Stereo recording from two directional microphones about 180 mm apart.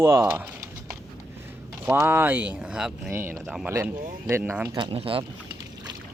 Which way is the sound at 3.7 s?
15° right (ahead or behind).